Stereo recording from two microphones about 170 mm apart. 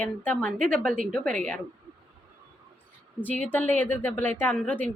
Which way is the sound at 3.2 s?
10° left (ahead or behind).